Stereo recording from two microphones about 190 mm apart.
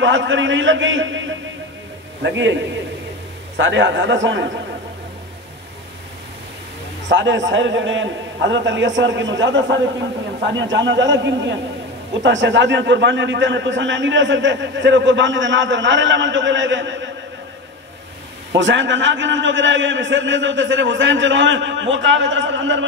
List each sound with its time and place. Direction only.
0.0 s a man's voice: 80° right
2.2 s a man's voice: 70° right (ahead or behind)
3.5 s a man's voice: 75° right (ahead or behind)
7.1 s a man's voice: 70° right (ahead or behind)
18.6 s a man's voice: 75° right (ahead or behind)